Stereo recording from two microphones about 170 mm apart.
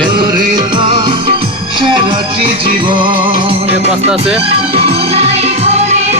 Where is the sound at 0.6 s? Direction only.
30° right (ahead or behind).